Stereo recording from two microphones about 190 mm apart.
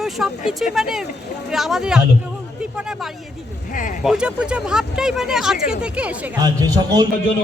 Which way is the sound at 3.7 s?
45° left (ahead or behind).